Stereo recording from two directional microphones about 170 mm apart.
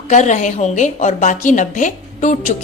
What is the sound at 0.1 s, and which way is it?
A woman's voice, 45° left (ahead or behind).